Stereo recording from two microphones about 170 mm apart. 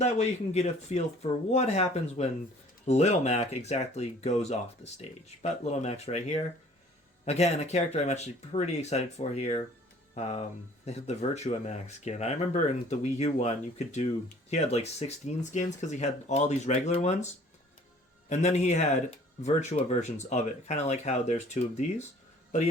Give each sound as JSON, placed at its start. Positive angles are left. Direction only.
{"t": 0.0, "sound": "speech", "side_deg": 40}
{"t": 18.3, "sound": "speech", "side_deg": 40}